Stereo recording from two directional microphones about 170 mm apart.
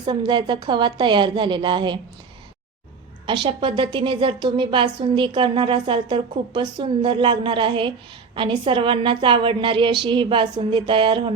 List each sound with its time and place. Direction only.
0.0 s a woman's voice: 25° right (ahead or behind)
3.2 s a woman's voice: 30° right (ahead or behind)